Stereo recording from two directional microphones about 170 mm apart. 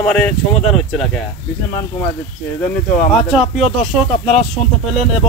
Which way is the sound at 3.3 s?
Centre (ahead or behind).